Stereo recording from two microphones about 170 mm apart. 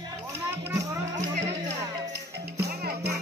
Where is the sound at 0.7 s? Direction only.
20° right (ahead or behind).